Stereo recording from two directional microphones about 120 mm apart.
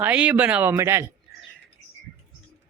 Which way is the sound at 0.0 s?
10° right (ahead or behind).